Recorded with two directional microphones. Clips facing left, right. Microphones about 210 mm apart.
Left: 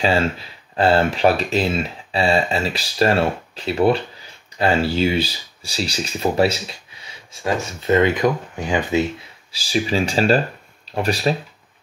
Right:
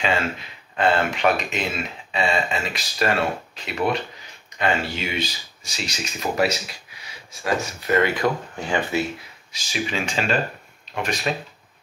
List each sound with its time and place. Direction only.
0.0 s speech: 35° left (ahead or behind); by 9.0 s 15° left (ahead or behind)
9.5 s speech: 35° left (ahead or behind)